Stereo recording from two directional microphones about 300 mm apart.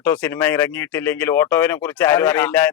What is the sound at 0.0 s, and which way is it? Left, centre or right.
A man's voice, centre.